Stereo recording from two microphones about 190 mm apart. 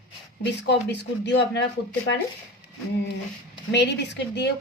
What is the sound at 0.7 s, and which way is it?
Speech, 65° left (ahead or behind).